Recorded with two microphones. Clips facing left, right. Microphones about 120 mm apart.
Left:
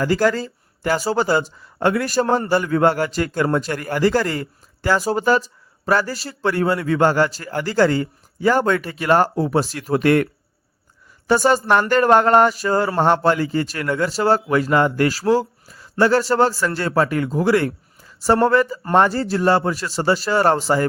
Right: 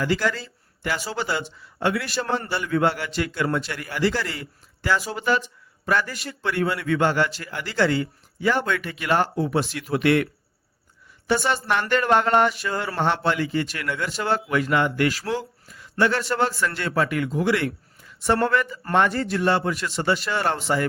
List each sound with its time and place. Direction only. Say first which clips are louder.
0.0 s a man's voice: left 6 dB; 40° left (ahead or behind)
11.3 s a man's voice: left 7 dB; 40° left (ahead or behind)